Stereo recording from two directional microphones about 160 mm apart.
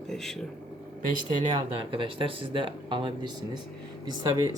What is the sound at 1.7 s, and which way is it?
Speech, 30° right (ahead or behind).